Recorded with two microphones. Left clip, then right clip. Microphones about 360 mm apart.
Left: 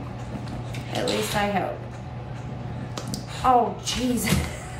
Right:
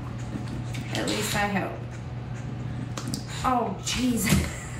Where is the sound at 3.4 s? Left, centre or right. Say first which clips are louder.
Left 6 dB; centre.